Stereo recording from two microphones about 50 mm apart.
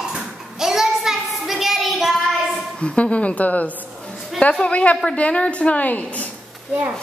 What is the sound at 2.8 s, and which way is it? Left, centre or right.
A woman's voice, left.